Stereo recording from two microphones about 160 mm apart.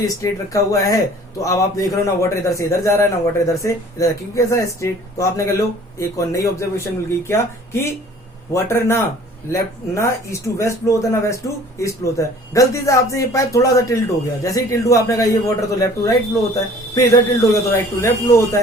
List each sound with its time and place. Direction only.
0.1 s a man's voice: 20° left (ahead or behind)
17.4 s a man's voice: 20° left (ahead or behind)